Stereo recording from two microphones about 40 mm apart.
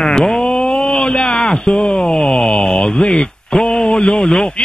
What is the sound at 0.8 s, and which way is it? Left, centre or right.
A man's voice, centre.